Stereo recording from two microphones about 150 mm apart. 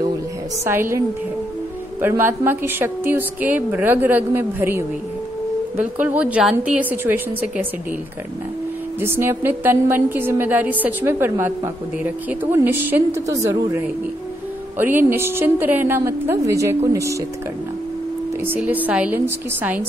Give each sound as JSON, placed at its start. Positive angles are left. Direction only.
{"t": 0.7, "sound": "a woman's voice", "side_deg": -15}
{"t": 9.0, "sound": "a woman's voice", "side_deg": -15}
{"t": 18.4, "sound": "a woman's voice", "side_deg": -10}